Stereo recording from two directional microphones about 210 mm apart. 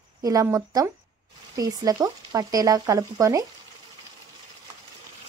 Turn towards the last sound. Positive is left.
turn(degrees=-15)  # may be behind; listen again after turning